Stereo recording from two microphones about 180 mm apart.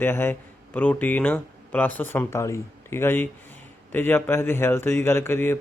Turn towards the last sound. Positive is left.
turn(degrees=15)  # may be behind; listen again after turning